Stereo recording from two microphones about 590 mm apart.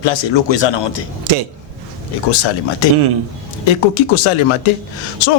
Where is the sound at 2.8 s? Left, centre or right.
Left.